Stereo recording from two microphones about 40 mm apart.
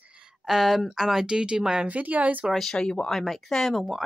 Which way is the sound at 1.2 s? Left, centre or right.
Right.